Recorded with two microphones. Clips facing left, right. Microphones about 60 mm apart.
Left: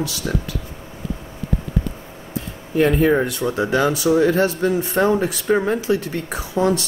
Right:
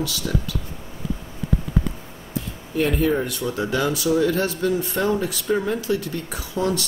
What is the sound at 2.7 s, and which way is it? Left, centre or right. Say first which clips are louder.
Speech: left 5 dB; left.